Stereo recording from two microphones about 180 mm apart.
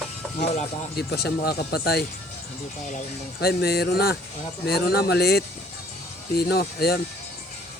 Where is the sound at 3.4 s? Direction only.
60° left (ahead or behind).